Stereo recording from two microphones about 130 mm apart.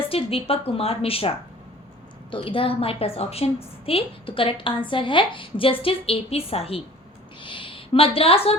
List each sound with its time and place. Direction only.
0.0 s a woman's voice: 45° left (ahead or behind)
2.3 s a woman's voice: 45° left (ahead or behind)